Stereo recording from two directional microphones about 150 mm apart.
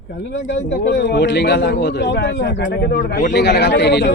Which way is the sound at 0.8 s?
90° left.